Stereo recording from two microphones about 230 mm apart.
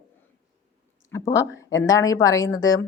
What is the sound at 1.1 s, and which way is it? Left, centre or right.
Speech, centre.